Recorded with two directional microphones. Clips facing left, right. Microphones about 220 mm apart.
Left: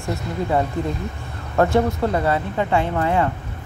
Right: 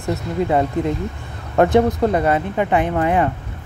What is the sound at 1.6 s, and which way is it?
Speech, 20° right (ahead or behind).